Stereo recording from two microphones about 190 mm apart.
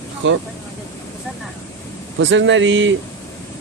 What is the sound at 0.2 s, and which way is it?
Speech, 80° right.